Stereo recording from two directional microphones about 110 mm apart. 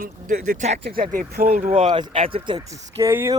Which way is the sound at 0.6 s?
80° right.